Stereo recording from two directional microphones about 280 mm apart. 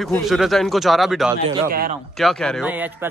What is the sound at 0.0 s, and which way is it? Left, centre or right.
A man's voice, centre.